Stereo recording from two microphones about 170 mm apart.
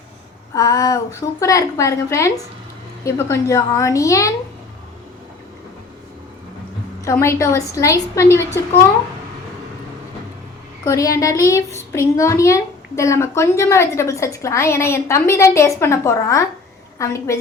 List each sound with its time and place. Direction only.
0.5 s a woman's voice: 20° left (ahead or behind)
7.0 s a child's voice: 15° left (ahead or behind)
10.8 s a child's voice: 20° left (ahead or behind)